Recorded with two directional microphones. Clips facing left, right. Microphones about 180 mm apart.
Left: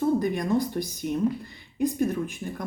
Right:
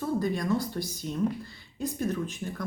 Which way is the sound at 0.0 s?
15° left (ahead or behind).